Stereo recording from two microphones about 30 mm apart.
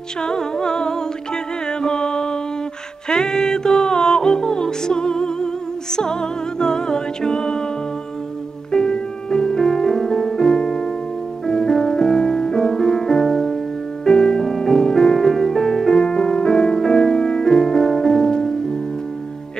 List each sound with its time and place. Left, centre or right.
0.2 s music: left
8.7 s music: left